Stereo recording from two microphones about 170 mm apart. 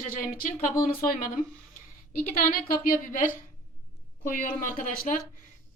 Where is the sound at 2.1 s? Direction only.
55° left (ahead or behind).